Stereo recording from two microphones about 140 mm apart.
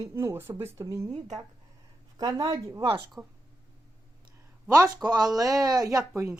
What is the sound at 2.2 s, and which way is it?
Speech, 30° right (ahead or behind).